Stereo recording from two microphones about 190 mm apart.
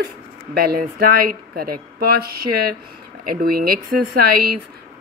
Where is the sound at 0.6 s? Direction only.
55° right (ahead or behind).